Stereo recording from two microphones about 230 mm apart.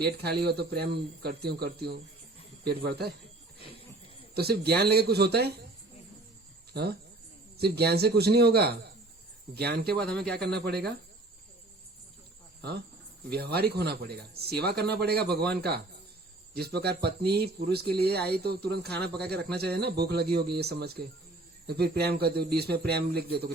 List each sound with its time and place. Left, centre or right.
0.0 s speech: right
4.4 s speech: right
7.6 s speech: right
10.0 s speech: centre
10.4 s speech: right
13.3 s speech: right